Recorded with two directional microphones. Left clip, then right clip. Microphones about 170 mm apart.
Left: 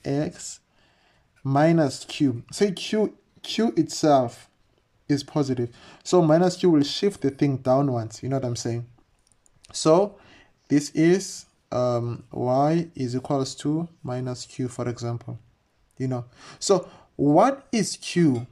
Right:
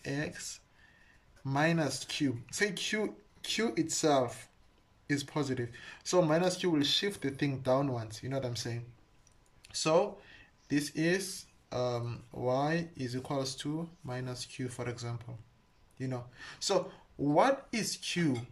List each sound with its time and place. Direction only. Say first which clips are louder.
0.0 s speech: left 10 dB; 40° left (ahead or behind)